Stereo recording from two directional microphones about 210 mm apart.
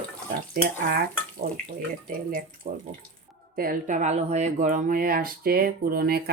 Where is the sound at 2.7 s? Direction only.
35° right (ahead or behind).